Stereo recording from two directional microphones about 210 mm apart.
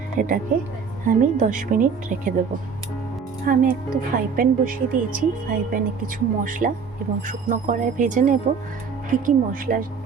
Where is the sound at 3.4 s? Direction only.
40° right (ahead or behind).